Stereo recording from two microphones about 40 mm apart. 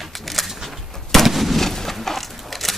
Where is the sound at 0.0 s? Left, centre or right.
Centre.